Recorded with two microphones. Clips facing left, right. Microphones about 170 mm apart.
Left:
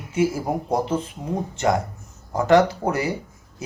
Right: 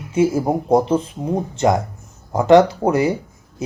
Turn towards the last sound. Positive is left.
turn(degrees=-20)  # may be behind; listen again after turning